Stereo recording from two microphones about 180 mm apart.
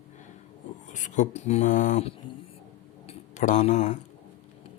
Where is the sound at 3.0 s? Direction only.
40° left (ahead or behind).